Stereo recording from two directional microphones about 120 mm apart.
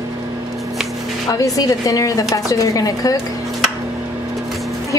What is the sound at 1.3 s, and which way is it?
A woman's voice, 30° left (ahead or behind).